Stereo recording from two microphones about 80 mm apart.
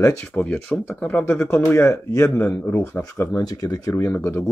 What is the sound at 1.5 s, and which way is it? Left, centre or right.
Speech, left.